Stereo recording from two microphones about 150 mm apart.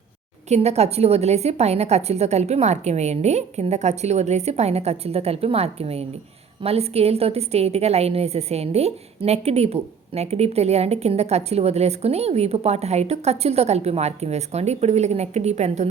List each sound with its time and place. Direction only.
0.4 s a woman's voice: 45° right (ahead or behind)